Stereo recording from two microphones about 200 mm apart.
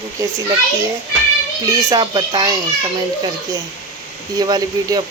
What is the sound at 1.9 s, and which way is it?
Speech, 20° right (ahead or behind).